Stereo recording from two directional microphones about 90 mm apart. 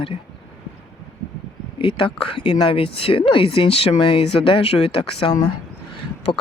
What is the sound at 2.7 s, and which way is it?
Speech, 90° left.